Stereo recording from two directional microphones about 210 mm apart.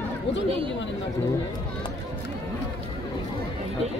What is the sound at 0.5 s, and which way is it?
Speech, 25° right (ahead or behind).